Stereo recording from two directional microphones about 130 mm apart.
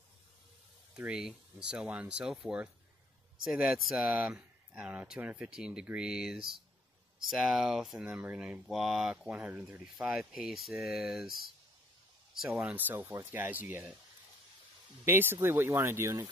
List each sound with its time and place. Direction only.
0.9 s speech: 5° right (ahead or behind)
8.1 s speech: 10° right (ahead or behind)
12.4 s speech: 10° right (ahead or behind)
15.0 s speech: 15° right (ahead or behind)